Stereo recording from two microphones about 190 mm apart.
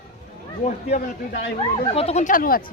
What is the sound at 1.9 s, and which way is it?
Speech, 30° left (ahead or behind).